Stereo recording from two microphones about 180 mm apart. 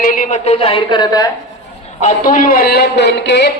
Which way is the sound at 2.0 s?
50° left (ahead or behind).